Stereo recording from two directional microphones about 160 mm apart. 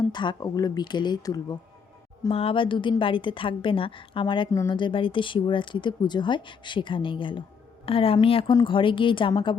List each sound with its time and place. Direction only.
0.1 s speech: 30° left (ahead or behind)
2.3 s a woman's voice: 35° left (ahead or behind)